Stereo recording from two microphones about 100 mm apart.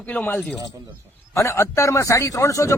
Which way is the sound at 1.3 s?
30° left (ahead or behind).